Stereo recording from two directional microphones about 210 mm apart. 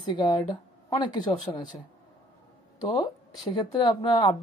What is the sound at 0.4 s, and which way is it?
Speech, 20° left (ahead or behind).